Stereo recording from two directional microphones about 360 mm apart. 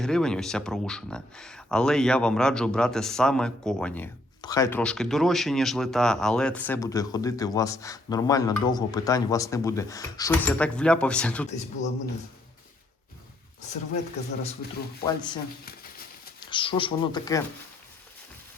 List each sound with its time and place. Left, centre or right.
0.0 s speech: centre
11.4 s a man's voice: centre
15.0 s speech: centre
15.6 s a sound: left
16.5 s speech: centre